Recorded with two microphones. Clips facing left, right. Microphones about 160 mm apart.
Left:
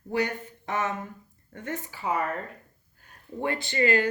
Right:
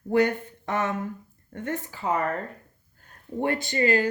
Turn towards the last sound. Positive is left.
turn(degrees=-35)  # may be behind; listen again after turning